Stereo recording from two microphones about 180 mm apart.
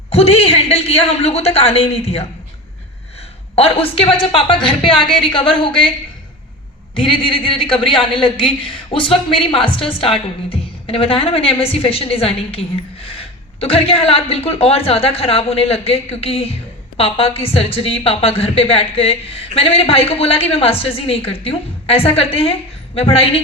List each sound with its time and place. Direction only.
0.1 s a woman's voice: 35° left (ahead or behind)
3.5 s a woman's voice: 35° left (ahead or behind)
6.9 s a woman's voice: 25° left (ahead or behind)